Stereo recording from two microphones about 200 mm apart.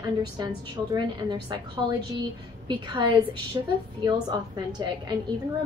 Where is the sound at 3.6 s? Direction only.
20° right (ahead or behind).